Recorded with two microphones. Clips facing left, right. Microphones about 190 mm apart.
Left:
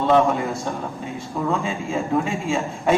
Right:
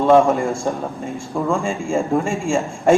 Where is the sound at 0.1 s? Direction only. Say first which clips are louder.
Right 4 dB; 50° right (ahead or behind).